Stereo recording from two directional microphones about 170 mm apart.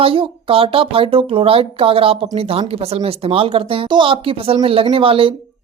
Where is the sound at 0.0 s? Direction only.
35° right (ahead or behind).